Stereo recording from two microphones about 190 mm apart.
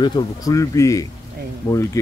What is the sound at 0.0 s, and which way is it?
Speech, 20° left (ahead or behind).